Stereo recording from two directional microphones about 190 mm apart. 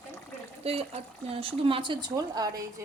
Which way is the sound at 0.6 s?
30° right (ahead or behind).